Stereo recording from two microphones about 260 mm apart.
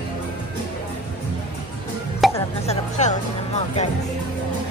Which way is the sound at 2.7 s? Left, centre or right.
Left.